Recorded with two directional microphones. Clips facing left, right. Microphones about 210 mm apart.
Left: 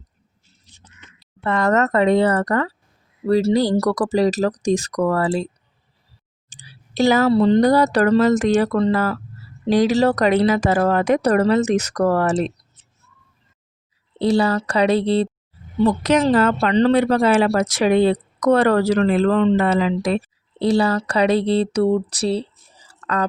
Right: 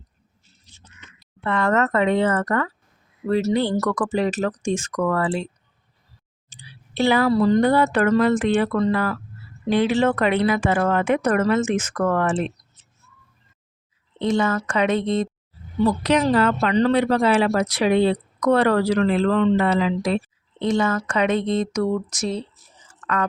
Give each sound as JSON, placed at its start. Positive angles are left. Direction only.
{"t": 1.4, "sound": "speech", "side_deg": 40}
{"t": 6.5, "sound": "a sound", "side_deg": 45}
{"t": 7.3, "sound": "speech", "side_deg": 30}
{"t": 14.2, "sound": "speech", "side_deg": 35}
{"t": 16.3, "sound": "speech", "side_deg": 45}
{"t": 16.6, "sound": "speech", "side_deg": 30}
{"t": 16.9, "sound": "speech", "side_deg": 45}
{"t": 19.5, "sound": "speech", "side_deg": 45}
{"t": 20.6, "sound": "speech", "side_deg": 35}